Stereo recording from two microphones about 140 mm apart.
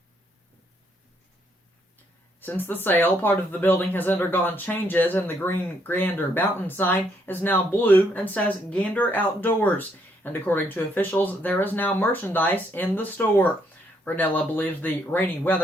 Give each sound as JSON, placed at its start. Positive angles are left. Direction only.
{"t": 2.4, "sound": "speech", "side_deg": 15}